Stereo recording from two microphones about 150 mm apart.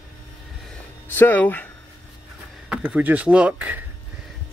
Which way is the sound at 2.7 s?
10° right (ahead or behind).